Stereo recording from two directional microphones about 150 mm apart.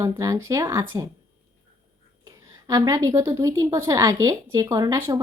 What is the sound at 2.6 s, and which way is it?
A woman's voice, 25° right (ahead or behind).